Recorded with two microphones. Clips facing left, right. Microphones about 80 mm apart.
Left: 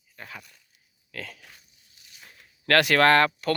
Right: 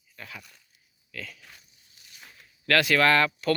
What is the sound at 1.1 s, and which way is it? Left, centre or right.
Speech, left.